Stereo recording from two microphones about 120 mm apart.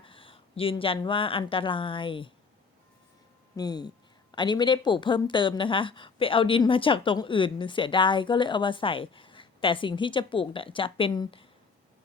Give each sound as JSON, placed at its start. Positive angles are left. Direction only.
{"t": 0.0, "sound": "speech", "side_deg": 50}
{"t": 3.5, "sound": "speech", "side_deg": 35}